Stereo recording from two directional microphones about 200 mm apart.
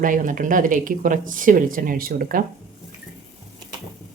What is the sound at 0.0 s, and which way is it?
Speech, 40° right (ahead or behind).